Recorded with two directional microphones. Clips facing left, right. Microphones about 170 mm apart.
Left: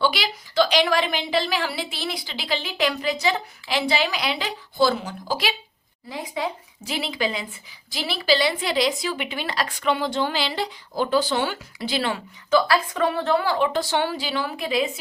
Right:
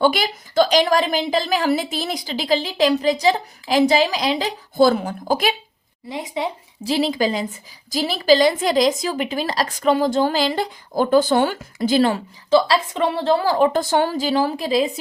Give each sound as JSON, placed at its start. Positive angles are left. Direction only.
{"t": 0.0, "sound": "a woman's voice", "side_deg": -50}
{"t": 6.1, "sound": "speech", "side_deg": -20}
{"t": 6.9, "sound": "a woman's voice", "side_deg": -40}